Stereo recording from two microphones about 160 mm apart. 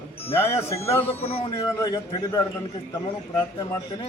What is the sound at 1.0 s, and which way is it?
Speech, 40° left (ahead or behind).